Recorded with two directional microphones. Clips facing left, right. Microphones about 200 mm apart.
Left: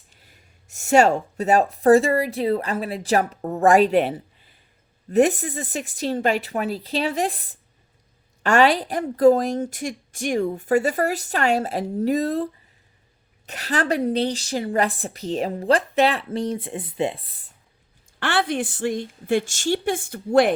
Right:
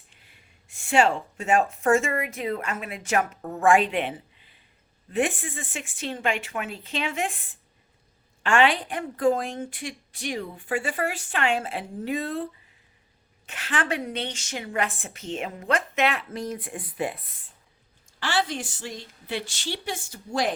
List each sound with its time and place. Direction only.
0.1 s a woman's voice: 40° left (ahead or behind)
18.2 s a woman's voice: 60° left (ahead or behind)